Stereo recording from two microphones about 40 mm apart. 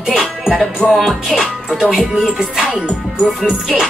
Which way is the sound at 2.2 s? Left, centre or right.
Centre.